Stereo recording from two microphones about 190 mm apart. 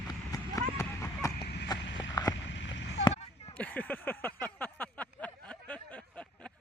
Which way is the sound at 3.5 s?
10° left (ahead or behind).